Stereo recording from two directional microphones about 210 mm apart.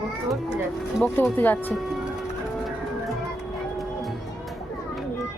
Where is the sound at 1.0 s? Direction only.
10° left (ahead or behind).